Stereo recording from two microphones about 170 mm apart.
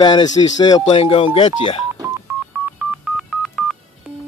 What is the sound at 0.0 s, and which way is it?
Speech, 30° left (ahead or behind).